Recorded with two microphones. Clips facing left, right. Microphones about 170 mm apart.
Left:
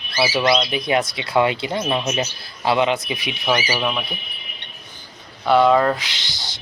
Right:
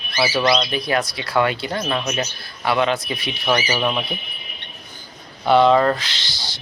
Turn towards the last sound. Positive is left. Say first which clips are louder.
# right 1 dB
turn(degrees=15)  # may be behind; listen again after turning